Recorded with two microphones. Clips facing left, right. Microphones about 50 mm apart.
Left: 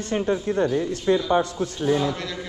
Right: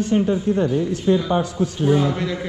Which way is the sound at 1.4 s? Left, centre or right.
Left.